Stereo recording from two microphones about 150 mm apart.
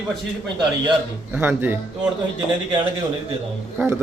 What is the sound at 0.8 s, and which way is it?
Speech, 10° right (ahead or behind).